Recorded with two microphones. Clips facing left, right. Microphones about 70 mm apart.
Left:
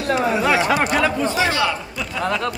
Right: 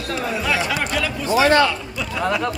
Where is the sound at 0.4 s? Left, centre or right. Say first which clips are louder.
Left 4 dB; left.